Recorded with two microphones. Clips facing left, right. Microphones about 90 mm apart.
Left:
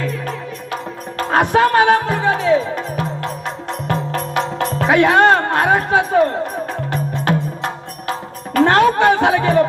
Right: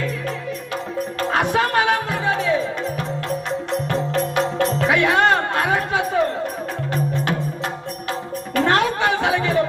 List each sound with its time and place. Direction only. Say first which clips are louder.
1.3 s music: left 7 dB; 45° left (ahead or behind)
3.8 s music: left 4 dB; 45° left (ahead or behind)